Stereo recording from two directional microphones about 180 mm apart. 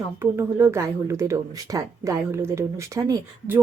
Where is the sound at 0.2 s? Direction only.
15° right (ahead or behind).